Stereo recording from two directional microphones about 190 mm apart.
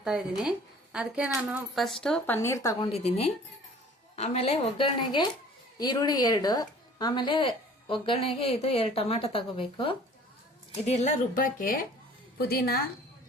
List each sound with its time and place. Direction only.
0.0 s a woman's voice: 5° right (ahead or behind); by 2.9 s 15° left (ahead or behind)
2.9 s a woman's voice: 35° left (ahead or behind)
10.8 s a woman's voice: 40° left (ahead or behind); by 12.8 s 55° left (ahead or behind)